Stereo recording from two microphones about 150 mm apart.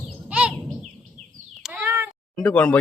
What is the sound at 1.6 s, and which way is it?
Meow, 10° right (ahead or behind).